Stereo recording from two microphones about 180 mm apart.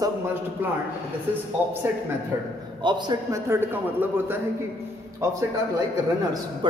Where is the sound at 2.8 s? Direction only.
25° right (ahead or behind).